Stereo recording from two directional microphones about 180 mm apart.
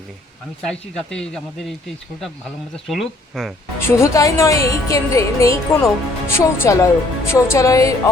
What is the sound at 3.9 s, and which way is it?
Speech, 15° left (ahead or behind).